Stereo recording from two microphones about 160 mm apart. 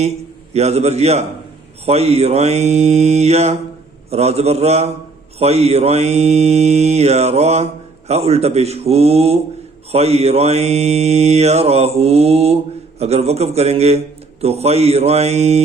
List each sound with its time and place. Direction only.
0.5 s mantra: 40° right (ahead or behind)